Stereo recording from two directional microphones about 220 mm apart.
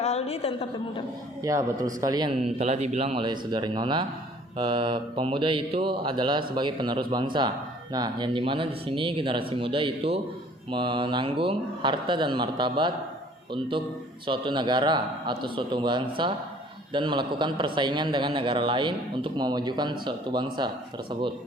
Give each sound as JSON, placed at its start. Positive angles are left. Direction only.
{"t": 0.0, "sound": "a woman's voice", "side_deg": 30}
{"t": 1.4, "sound": "speech", "side_deg": -15}
{"t": 2.6, "sound": "a man's voice", "side_deg": -30}